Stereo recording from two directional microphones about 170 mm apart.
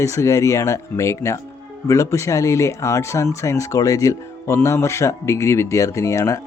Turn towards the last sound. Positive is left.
turn(degrees=15)  # may be behind; listen again after turning